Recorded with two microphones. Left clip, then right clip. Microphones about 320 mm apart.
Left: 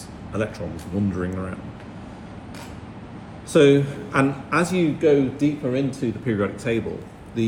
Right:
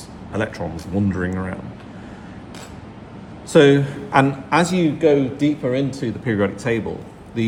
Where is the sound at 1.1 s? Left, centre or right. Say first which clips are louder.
Right 3 dB; right.